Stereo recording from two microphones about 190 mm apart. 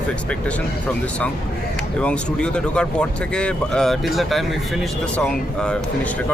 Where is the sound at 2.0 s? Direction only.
5° left (ahead or behind).